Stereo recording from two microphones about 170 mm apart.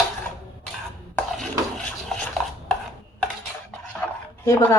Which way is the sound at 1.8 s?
5° left (ahead or behind).